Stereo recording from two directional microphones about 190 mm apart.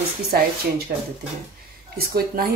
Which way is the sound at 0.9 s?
50° right (ahead or behind).